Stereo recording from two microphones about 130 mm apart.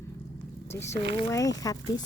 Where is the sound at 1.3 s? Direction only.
25° left (ahead or behind).